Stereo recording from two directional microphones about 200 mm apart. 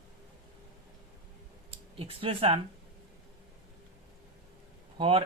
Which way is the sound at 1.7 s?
30° right (ahead or behind).